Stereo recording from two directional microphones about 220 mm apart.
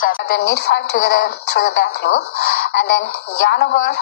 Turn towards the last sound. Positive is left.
turn(degrees=50)  # may be behind; listen again after turning